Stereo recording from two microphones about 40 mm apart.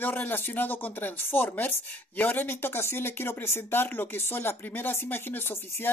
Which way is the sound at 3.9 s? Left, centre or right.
Left.